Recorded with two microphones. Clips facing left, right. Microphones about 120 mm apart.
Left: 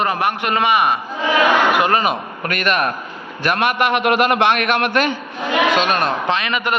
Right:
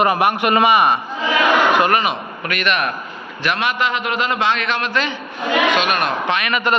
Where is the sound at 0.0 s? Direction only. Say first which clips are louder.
Right 3 dB; 10° right (ahead or behind).